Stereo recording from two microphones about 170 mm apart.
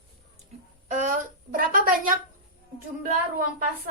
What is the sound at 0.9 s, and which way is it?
A woman's voice, 50° right (ahead or behind).